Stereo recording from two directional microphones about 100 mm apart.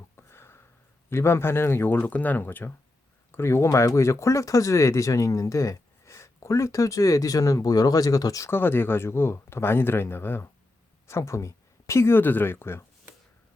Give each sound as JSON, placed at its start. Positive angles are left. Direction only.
{"t": 0.2, "sound": "sniff", "side_deg": 25}
{"t": 1.1, "sound": "speech", "side_deg": 25}
{"t": 8.4, "sound": "speech", "side_deg": 20}